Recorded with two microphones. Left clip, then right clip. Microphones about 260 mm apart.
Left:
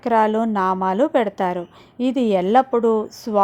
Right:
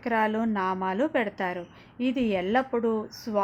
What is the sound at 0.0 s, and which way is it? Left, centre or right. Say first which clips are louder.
A woman's voice: left 9 dB; left.